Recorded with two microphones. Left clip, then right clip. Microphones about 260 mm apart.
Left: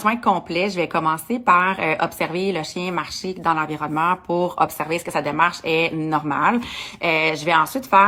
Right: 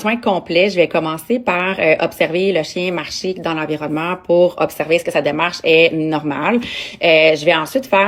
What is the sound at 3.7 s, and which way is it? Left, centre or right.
Speech, centre.